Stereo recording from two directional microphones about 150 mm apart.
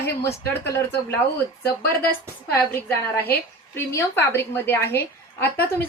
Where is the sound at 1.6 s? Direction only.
85° left.